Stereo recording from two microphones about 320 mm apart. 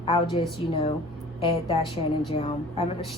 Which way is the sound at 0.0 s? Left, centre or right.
Centre.